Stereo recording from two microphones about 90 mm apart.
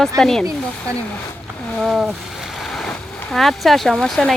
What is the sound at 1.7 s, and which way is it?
Speech, 5° right (ahead or behind).